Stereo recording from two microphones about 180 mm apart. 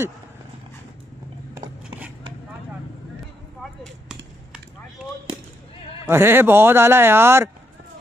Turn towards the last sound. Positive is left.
turn(degrees=-15)  # may be behind; listen again after turning